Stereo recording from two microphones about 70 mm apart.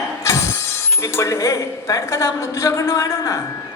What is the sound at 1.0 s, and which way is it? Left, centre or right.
A woman's voice, left.